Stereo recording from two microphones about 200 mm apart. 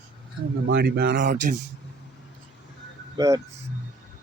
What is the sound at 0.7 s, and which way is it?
Speech, 50° right (ahead or behind).